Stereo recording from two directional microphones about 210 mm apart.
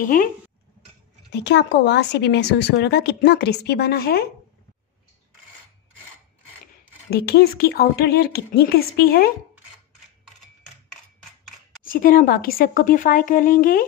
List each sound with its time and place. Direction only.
0.0 s a woman's voice: 40° left (ahead or behind)
1.3 s speech: 55° left (ahead or behind)
7.1 s speech: 50° left (ahead or behind)
11.8 s a woman's voice: 40° left (ahead or behind)